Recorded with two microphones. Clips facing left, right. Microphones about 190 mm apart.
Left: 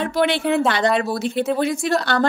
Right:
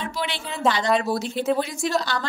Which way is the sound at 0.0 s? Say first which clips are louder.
Left 10 dB; 60° left (ahead or behind).